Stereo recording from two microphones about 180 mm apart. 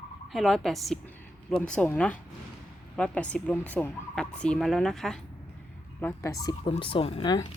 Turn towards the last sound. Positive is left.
turn(degrees=25)  # may be behind; listen again after turning